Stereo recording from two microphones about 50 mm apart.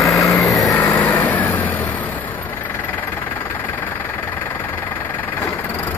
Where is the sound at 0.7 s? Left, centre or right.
Left.